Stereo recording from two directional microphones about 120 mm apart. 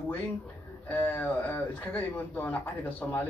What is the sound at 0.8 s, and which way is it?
Speech, 15° left (ahead or behind).